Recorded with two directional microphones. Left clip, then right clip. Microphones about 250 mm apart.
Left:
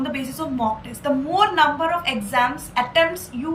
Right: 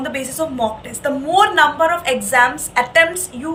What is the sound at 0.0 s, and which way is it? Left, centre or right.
Speech, centre.